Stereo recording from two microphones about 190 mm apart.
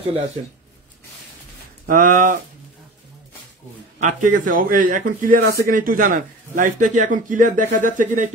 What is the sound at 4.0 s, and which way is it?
A man's voice, 45° right (ahead or behind).